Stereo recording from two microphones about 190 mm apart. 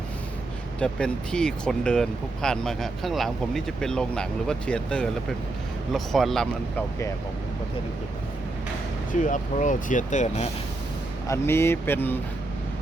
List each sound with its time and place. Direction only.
0.8 s speech: 5° left (ahead or behind)
9.1 s speech: 40° left (ahead or behind)
11.3 s speech: 15° left (ahead or behind)